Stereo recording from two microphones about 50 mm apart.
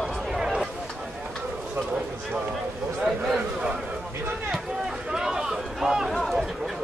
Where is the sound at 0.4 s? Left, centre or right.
Centre.